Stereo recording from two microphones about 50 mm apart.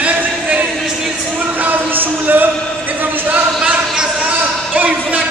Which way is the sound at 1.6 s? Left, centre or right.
Right.